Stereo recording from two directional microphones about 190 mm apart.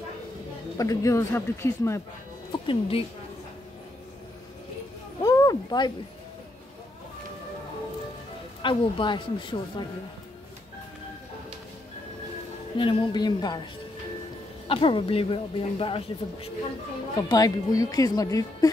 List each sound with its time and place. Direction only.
0.7 s speech: 15° left (ahead or behind)
2.5 s speech: 25° left (ahead or behind)
5.2 s a sound: 20° left (ahead or behind)
8.6 s speech: 25° left (ahead or behind)
12.7 s speech: 25° left (ahead or behind)
14.7 s speech: 25° left (ahead or behind)
17.3 s speech: 20° left (ahead or behind)